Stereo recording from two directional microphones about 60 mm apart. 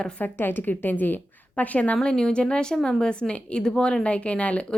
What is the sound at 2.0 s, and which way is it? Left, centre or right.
A woman's voice, centre.